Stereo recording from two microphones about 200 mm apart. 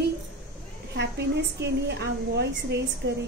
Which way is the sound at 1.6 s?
60° right (ahead or behind).